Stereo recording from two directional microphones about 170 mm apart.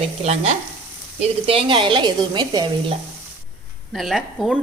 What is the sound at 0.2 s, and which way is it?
Frying, 40° right (ahead or behind).